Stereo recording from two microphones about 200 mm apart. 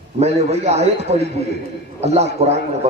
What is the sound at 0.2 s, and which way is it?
A man's voice, 35° right (ahead or behind).